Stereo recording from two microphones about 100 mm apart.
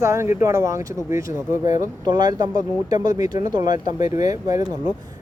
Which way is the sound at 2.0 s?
45° right (ahead or behind).